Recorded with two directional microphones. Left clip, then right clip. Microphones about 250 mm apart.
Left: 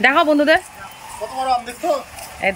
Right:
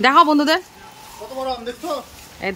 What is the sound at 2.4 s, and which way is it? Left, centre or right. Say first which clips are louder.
Speech: left 6 dB; centre.